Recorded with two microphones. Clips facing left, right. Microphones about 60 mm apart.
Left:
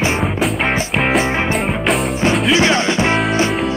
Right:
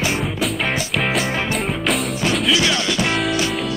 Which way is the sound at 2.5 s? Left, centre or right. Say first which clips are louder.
Left 5 dB; left.